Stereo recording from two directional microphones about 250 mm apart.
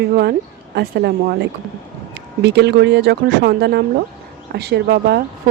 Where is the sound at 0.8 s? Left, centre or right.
Right.